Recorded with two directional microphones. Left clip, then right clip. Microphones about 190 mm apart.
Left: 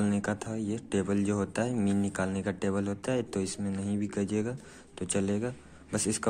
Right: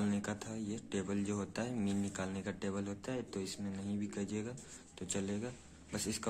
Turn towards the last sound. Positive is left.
turn(degrees=15)  # may be behind; listen again after turning